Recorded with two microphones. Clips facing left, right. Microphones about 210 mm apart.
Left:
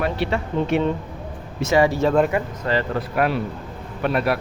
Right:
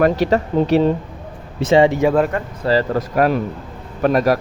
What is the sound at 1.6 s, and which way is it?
Speech, 25° right (ahead or behind).